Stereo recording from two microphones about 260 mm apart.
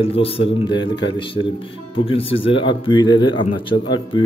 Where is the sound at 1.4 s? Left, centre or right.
Left.